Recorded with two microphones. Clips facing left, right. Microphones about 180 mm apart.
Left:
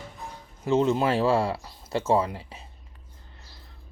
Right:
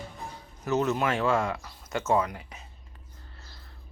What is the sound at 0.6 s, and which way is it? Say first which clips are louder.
Speech: left 4 dB; 25° left (ahead or behind).